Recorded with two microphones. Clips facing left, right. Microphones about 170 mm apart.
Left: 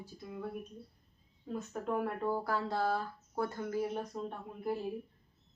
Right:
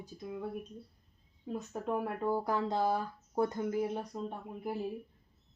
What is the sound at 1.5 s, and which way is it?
Speech, 10° right (ahead or behind).